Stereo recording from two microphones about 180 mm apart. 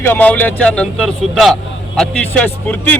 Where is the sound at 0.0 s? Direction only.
10° left (ahead or behind).